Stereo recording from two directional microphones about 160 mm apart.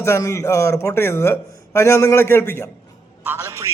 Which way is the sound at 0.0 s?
15° left (ahead or behind).